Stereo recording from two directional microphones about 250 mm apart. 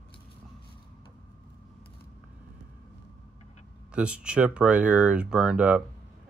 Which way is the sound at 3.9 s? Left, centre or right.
Centre.